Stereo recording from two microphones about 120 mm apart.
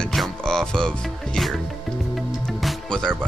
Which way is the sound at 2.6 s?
5° left (ahead or behind).